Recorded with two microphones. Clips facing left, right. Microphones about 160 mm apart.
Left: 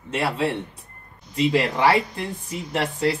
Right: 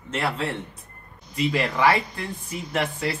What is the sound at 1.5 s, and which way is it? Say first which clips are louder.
Speech: left 1 dB; 25° left (ahead or behind).